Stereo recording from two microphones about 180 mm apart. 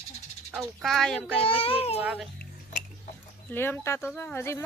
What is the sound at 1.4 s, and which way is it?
Speech, 30° left (ahead or behind).